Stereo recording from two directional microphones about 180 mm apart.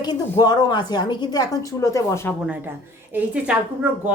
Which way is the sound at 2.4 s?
10° right (ahead or behind).